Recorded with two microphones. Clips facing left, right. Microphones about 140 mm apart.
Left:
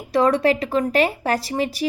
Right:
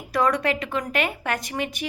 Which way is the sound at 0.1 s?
25° left (ahead or behind).